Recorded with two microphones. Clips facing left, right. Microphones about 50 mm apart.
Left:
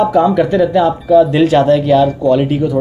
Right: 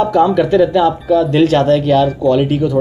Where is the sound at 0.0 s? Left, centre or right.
Centre.